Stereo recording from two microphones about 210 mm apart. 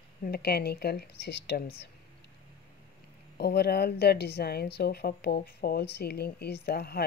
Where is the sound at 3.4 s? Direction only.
50° left (ahead or behind).